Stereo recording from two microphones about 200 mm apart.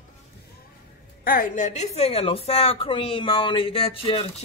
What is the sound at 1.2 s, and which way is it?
A woman's voice, 45° left (ahead or behind).